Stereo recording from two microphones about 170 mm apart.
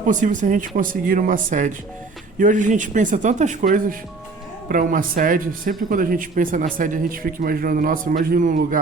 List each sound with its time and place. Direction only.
0.0 s speech: 50° right (ahead or behind)